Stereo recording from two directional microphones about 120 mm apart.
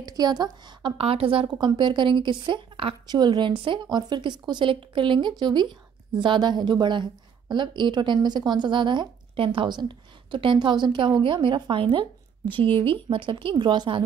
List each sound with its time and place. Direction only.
0.0 s a woman's voice: 30° right (ahead or behind)
1.0 s a woman's voice: 50° right (ahead or behind)